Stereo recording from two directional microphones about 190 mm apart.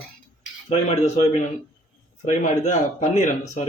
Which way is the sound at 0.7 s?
35° left (ahead or behind).